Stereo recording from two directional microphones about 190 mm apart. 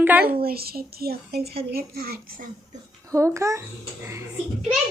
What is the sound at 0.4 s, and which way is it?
Speech, 55° right (ahead or behind).